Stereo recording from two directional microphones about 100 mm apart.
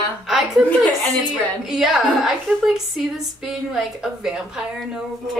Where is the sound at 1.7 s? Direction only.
5° right (ahead or behind).